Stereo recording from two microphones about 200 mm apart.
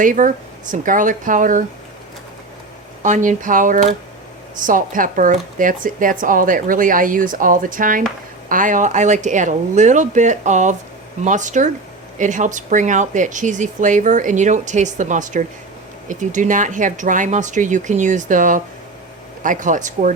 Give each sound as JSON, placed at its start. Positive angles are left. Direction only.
{"t": 0.0, "sound": "speech", "side_deg": -40}
{"t": 3.0, "sound": "speech", "side_deg": -40}